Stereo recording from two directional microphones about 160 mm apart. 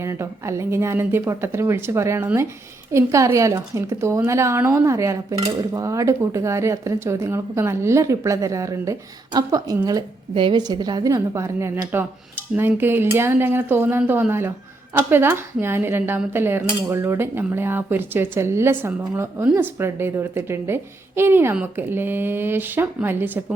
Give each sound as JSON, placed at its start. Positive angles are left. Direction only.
{"t": 0.0, "sound": "a woman's voice", "side_deg": -15}